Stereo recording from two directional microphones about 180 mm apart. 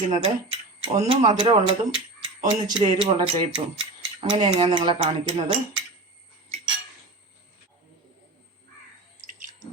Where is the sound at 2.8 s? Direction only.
30° right (ahead or behind).